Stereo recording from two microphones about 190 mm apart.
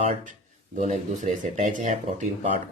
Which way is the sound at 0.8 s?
40° right (ahead or behind).